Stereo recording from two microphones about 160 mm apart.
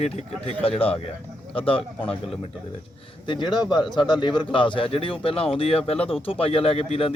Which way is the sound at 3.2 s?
30° left (ahead or behind).